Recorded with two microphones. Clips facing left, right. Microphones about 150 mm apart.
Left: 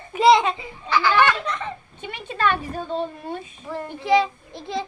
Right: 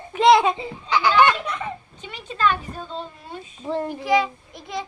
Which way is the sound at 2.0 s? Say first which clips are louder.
Even; 60° left (ahead or behind).